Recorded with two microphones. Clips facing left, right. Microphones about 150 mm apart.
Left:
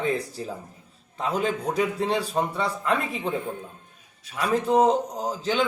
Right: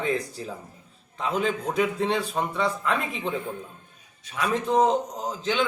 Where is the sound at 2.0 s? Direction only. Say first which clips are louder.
Left 1 dB; centre (ahead or behind).